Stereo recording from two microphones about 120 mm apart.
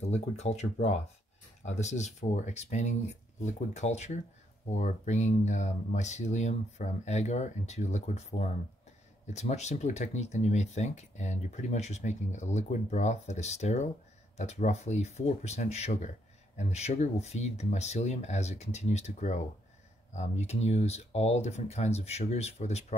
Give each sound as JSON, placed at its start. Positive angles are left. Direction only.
{"t": 0.0, "sound": "speech", "side_deg": 70}